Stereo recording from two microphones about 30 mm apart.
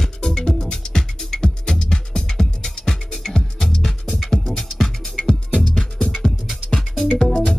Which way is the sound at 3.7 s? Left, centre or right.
Centre.